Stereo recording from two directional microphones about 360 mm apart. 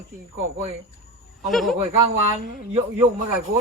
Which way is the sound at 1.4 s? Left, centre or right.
Centre.